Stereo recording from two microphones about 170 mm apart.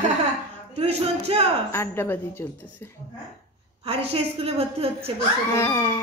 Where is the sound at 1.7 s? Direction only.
15° left (ahead or behind).